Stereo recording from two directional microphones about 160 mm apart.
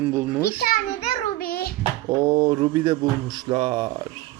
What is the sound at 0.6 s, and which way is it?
Speech, 65° left (ahead or behind).